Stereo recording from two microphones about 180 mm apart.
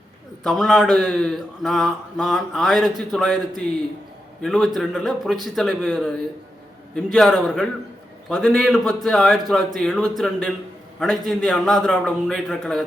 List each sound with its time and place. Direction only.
0.4 s speech: centre (ahead or behind)